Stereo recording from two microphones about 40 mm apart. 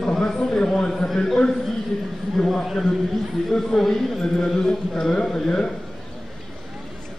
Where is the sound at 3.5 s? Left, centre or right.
Centre.